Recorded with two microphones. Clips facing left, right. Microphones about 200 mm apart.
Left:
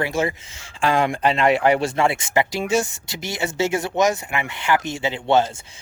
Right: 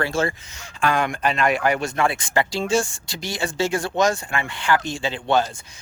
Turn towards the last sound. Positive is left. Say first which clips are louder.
# left 2 dB
turn(degrees=20)  # may be behind; listen again after turning